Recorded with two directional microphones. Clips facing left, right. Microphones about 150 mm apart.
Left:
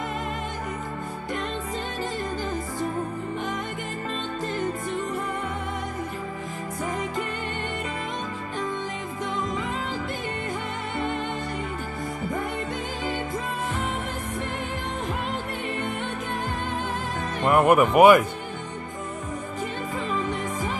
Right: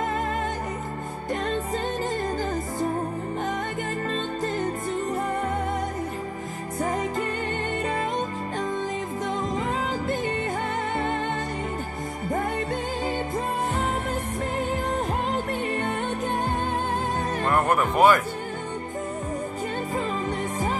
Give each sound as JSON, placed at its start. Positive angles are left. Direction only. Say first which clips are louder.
{"t": 2.3, "sound": "music", "louder": "right 2 dB", "side_deg": -35}
{"t": 6.8, "sound": "music", "louder": "right 3 dB", "side_deg": -35}
{"t": 9.2, "sound": "music", "louder": "even", "side_deg": -35}
{"t": 17.5, "sound": "speech", "louder": "left 6 dB", "side_deg": 15}
{"t": 20.0, "sound": "music", "louder": "left 1 dB", "side_deg": -35}